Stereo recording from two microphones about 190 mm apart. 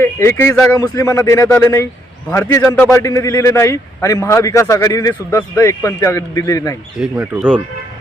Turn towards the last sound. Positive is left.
turn(degrees=-5)  # may be behind; listen again after turning